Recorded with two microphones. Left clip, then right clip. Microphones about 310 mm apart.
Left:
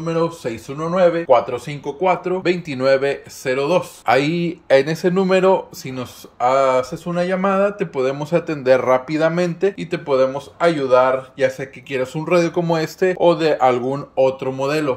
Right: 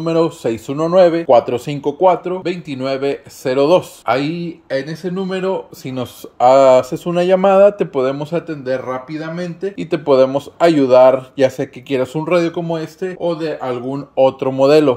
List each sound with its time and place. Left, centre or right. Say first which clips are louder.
0.0 s speech: right 5 dB; centre
2.4 s speech: left 4 dB; centre
3.5 s speech: right 6 dB; right
4.0 s speech: left 1 dB; centre
4.4 s speech: left 6 dB; centre
5.9 s speech: right 5 dB; right; by 9.8 s centre
9.8 s speech: right 10 dB; centre